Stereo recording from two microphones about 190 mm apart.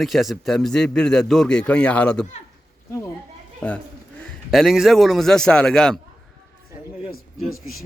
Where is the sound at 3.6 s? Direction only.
5° left (ahead or behind).